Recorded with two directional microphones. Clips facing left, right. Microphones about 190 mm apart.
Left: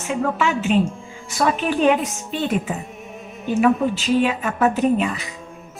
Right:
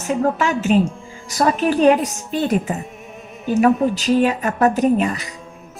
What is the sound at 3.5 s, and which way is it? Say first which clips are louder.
Speech: right 2 dB; 40° right (ahead or behind).